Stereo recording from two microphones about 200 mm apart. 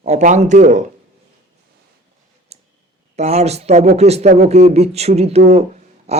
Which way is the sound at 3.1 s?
30° right (ahead or behind).